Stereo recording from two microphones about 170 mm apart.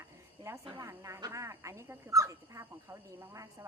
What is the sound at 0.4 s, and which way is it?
A woman's voice, 20° right (ahead or behind).